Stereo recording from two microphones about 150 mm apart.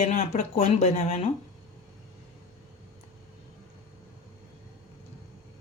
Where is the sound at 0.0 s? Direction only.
50° left (ahead or behind).